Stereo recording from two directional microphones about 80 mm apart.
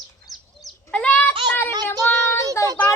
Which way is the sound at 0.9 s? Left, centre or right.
Centre.